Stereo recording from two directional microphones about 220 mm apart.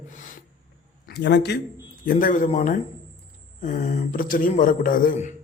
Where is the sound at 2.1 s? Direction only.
40° left (ahead or behind).